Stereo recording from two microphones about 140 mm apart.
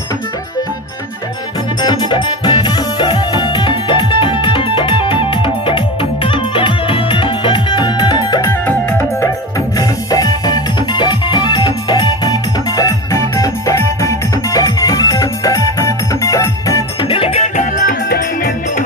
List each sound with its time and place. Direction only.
1.8 s music: 30° left (ahead or behind)
8.5 s music: 15° left (ahead or behind)
17.1 s music: 40° left (ahead or behind)
17.6 s music: 80° left